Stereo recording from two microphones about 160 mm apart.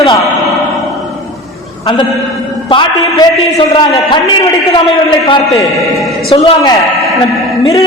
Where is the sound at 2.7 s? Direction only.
30° left (ahead or behind).